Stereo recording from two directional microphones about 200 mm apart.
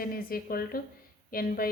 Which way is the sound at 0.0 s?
45° left (ahead or behind).